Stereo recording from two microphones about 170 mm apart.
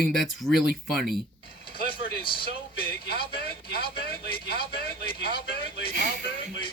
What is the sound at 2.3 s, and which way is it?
Vehicle, 65° left (ahead or behind).